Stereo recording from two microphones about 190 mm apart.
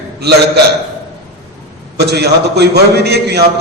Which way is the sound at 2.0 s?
60° right (ahead or behind).